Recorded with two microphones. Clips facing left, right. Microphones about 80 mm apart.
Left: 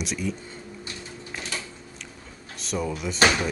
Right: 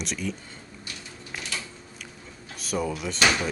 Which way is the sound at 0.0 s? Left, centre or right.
Centre.